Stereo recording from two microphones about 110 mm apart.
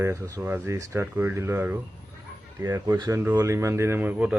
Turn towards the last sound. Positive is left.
turn(degrees=-15)  # may be behind; listen again after turning